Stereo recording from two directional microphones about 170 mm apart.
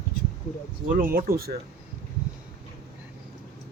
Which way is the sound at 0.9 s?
55° right (ahead or behind).